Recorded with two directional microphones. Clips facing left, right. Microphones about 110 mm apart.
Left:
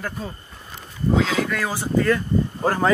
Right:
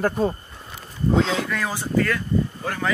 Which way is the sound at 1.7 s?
20° left (ahead or behind).